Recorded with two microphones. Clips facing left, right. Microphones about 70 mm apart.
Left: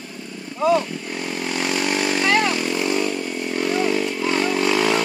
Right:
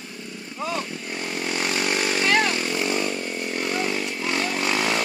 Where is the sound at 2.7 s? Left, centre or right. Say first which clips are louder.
Left 3 dB; centre.